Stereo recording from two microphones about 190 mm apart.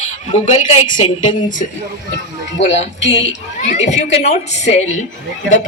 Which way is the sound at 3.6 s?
35° left (ahead or behind).